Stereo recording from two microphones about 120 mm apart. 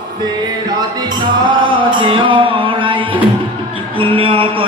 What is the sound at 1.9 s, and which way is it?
Music, 45° right (ahead or behind).